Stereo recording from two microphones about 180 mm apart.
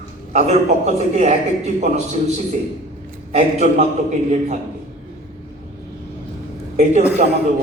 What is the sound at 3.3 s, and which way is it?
Speech, 40° right (ahead or behind).